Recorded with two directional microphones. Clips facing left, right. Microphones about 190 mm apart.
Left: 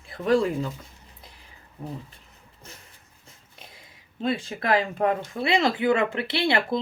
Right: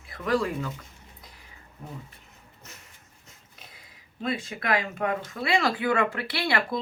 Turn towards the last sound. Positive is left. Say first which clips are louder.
# left 4 dB
turn(degrees=25)  # may be behind; listen again after turning